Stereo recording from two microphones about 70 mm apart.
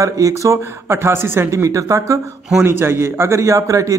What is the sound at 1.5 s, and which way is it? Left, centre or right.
Speech, right.